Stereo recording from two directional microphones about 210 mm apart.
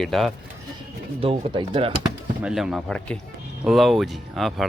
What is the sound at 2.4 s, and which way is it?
Speech, 5° right (ahead or behind).